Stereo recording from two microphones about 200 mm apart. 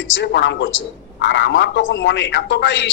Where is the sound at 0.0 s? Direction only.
65° left (ahead or behind).